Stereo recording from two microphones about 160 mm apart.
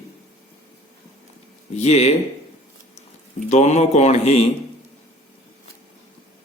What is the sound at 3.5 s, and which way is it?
Mantra, 45° left (ahead or behind).